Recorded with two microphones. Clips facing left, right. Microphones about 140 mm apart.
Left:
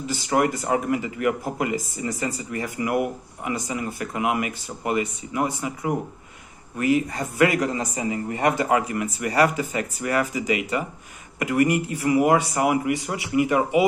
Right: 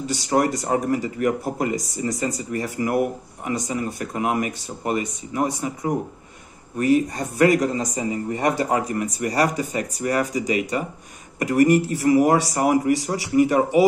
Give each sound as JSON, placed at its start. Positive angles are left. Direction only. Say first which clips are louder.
{"t": 0.0, "sound": "speech", "louder": "right 1 dB", "side_deg": -35}